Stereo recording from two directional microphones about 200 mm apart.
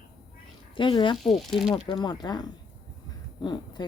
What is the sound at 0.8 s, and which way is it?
Speech, 25° left (ahead or behind).